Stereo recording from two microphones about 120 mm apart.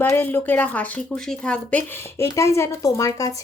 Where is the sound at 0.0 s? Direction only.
15° left (ahead or behind).